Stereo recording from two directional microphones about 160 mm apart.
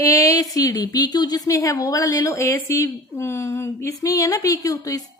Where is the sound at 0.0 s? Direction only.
20° left (ahead or behind).